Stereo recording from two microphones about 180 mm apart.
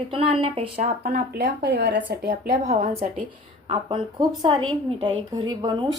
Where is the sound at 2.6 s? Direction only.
40° right (ahead or behind).